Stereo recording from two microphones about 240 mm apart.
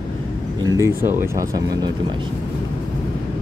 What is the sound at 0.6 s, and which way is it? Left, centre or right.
Speech, centre.